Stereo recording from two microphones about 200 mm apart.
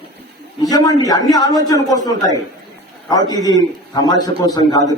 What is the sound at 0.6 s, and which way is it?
A man's voice, 20° left (ahead or behind).